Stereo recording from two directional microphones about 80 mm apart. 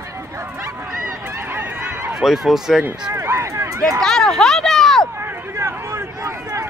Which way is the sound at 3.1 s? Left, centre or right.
Right.